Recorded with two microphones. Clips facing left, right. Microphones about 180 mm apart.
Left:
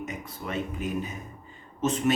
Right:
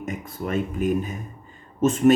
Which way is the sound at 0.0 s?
50° right (ahead or behind).